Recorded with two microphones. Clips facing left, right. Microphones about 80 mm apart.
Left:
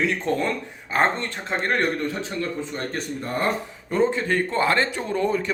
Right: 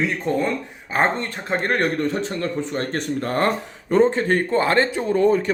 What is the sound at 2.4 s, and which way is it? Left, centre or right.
Speech, right.